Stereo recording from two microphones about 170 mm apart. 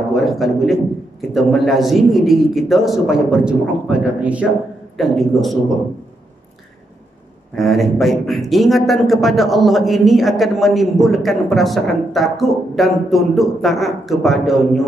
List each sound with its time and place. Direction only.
0.1 s a man's voice: centre (ahead or behind)
7.5 s a man's voice: centre (ahead or behind)